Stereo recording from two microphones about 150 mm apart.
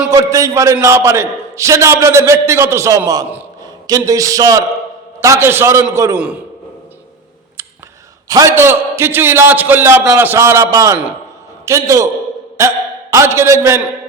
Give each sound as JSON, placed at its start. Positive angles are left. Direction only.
{"t": 0.1, "sound": "a man's voice", "side_deg": -20}
{"t": 8.3, "sound": "a man's voice", "side_deg": -20}
{"t": 13.1, "sound": "a man's voice", "side_deg": -20}